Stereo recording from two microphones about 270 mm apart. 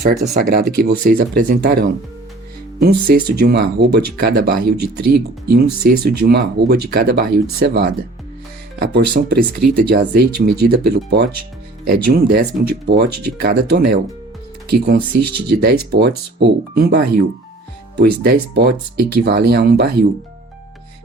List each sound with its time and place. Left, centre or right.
0.0 s speech: right